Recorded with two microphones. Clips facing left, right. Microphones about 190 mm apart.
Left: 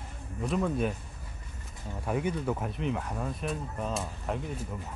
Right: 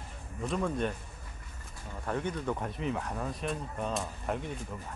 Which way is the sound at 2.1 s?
10° left (ahead or behind).